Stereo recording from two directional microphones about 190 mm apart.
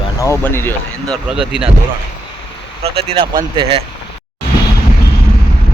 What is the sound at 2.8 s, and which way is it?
Speech, 30° right (ahead or behind).